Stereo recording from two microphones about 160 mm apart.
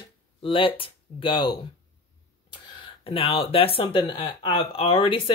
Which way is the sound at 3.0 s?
35° left (ahead or behind).